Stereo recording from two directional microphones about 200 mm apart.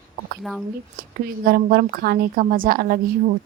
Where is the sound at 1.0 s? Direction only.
45° right (ahead or behind).